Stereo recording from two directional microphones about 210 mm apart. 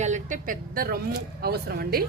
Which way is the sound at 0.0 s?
35° right (ahead or behind).